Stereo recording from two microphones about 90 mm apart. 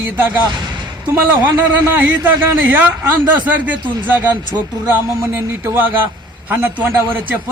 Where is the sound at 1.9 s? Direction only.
25° right (ahead or behind).